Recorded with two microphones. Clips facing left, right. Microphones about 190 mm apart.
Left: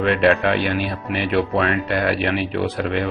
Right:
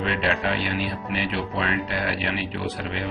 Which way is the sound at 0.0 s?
55° left (ahead or behind).